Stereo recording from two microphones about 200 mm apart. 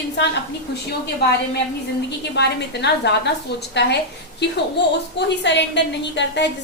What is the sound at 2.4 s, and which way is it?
A woman's voice, 55° left (ahead or behind).